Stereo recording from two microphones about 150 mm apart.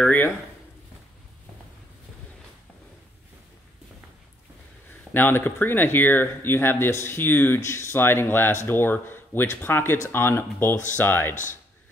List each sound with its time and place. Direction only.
0.0 s speech: 10° left (ahead or behind)
5.1 s speech: 15° left (ahead or behind)